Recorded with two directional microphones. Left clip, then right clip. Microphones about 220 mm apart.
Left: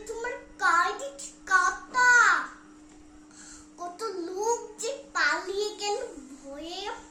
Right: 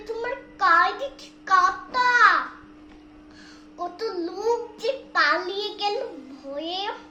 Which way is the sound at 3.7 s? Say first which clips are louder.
Right 5 dB; centre (ahead or behind).